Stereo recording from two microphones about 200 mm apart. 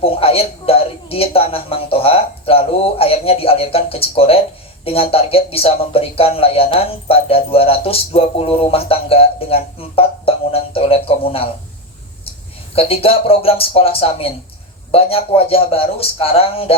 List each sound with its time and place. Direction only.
0.0 s speech: 30° left (ahead or behind)
12.7 s speech: 30° left (ahead or behind)